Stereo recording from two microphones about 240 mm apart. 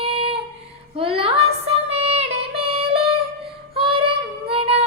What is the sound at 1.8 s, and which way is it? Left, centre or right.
Music, right.